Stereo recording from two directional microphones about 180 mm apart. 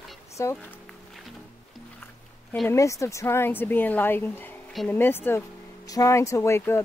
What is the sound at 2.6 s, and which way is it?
A woman's voice, 15° left (ahead or behind).